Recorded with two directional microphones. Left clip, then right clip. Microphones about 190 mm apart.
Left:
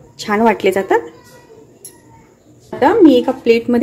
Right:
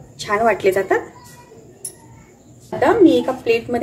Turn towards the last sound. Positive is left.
turn(degrees=50)  # may be behind; listen again after turning